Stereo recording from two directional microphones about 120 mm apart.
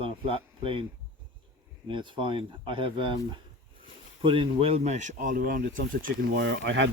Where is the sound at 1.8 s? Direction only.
45° right (ahead or behind); by 5.8 s 90° right.